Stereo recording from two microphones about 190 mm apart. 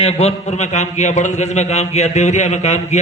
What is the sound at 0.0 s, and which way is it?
A man's voice, 35° left (ahead or behind).